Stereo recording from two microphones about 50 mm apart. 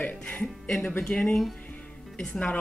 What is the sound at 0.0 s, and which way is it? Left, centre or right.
Speech, left.